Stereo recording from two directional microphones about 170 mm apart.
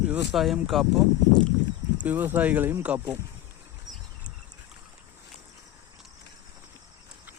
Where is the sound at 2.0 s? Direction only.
10° right (ahead or behind).